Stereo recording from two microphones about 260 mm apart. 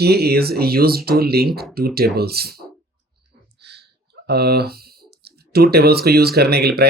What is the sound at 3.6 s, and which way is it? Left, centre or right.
Speech, right.